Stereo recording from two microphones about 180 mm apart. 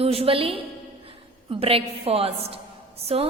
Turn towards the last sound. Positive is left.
turn(degrees=-35)  # may be behind; listen again after turning